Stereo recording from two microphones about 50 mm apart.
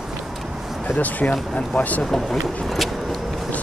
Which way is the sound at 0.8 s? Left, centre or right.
Left.